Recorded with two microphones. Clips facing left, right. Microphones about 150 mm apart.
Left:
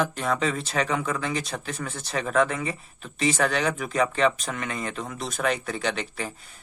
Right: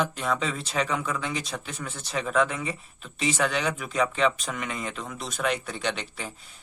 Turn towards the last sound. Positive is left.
turn(degrees=45)  # may be behind; listen again after turning